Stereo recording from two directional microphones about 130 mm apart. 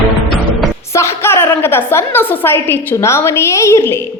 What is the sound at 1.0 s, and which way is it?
A woman's voice, 20° left (ahead or behind).